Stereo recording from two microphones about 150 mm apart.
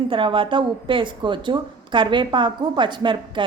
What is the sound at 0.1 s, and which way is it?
A woman's voice, 35° right (ahead or behind).